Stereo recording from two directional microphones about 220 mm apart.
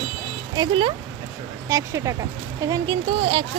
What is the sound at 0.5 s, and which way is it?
Speech, 20° right (ahead or behind).